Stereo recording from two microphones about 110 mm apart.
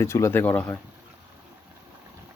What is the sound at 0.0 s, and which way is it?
Speech, 25° left (ahead or behind).